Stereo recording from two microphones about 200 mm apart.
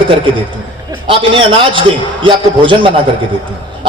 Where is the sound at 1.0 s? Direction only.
25° right (ahead or behind).